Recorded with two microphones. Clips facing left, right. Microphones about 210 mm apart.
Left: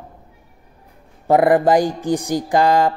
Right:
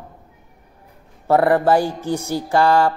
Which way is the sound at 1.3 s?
15° left (ahead or behind).